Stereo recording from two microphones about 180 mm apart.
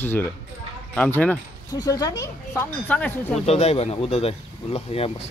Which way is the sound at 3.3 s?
35° left (ahead or behind).